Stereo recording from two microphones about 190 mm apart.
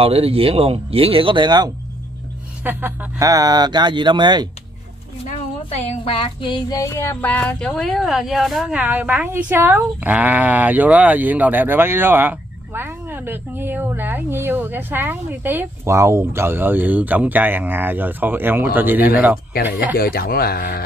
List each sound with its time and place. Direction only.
0.0 s speech: 30° right (ahead or behind)
2.6 s speech: 10° right (ahead or behind)
5.3 s a woman's voice: 35° left (ahead or behind); by 20.0 s 10° right (ahead or behind)
20.0 s a man's voice: 50° left (ahead or behind)